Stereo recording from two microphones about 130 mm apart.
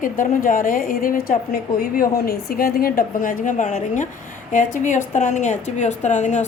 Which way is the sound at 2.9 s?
90° left.